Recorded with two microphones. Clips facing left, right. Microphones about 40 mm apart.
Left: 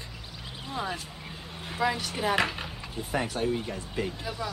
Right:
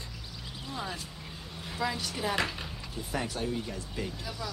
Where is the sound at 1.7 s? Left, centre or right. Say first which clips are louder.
Left 5 dB; left.